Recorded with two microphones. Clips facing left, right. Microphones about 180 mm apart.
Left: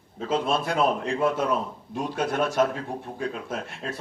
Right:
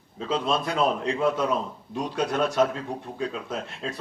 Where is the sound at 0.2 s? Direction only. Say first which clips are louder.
Left 1 dB; 55° left (ahead or behind).